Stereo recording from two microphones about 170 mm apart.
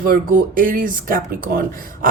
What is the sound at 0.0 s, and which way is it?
Speech, 55° right (ahead or behind).